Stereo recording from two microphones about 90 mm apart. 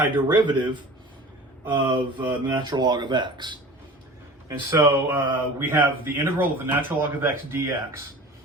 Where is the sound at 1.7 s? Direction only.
60° right (ahead or behind).